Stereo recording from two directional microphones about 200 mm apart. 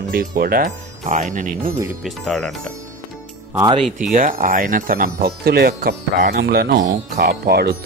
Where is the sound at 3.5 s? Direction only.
15° right (ahead or behind).